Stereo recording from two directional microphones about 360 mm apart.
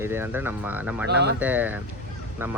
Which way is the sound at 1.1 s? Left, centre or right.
Right.